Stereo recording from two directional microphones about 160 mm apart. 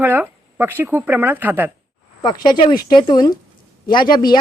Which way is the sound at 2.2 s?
25° left (ahead or behind).